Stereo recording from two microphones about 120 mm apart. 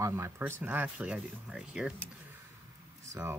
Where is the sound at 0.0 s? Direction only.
20° right (ahead or behind).